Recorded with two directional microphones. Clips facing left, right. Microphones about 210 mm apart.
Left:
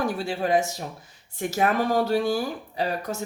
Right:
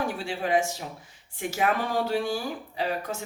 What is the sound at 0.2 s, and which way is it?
Speech, 40° left (ahead or behind).